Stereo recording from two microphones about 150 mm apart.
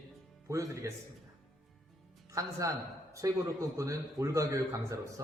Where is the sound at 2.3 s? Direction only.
20° right (ahead or behind).